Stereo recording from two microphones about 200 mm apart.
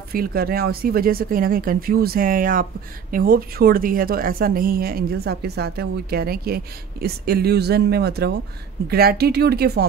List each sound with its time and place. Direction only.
0.1 s a woman's voice: 50° right (ahead or behind)